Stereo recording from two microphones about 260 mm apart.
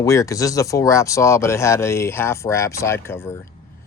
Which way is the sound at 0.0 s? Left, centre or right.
Centre.